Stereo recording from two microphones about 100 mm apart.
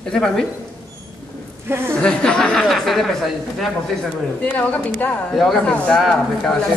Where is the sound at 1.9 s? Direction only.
10° left (ahead or behind).